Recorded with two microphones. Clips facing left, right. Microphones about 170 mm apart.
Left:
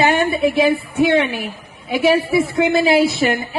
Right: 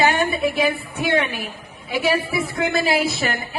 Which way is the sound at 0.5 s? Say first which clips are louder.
Left 6 dB; 25° left (ahead or behind).